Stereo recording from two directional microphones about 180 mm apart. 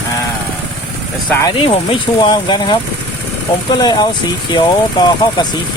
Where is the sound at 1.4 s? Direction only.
30° left (ahead or behind).